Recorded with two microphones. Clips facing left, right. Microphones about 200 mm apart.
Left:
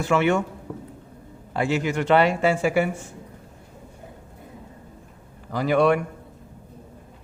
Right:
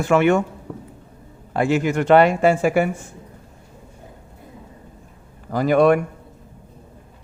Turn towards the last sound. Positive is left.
turn(degrees=-50)  # may be behind; listen again after turning